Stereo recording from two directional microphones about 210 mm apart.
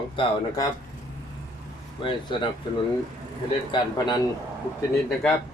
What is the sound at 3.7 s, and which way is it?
Speech, 20° left (ahead or behind).